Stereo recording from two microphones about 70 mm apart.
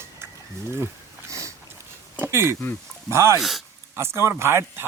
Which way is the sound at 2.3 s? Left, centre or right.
Right.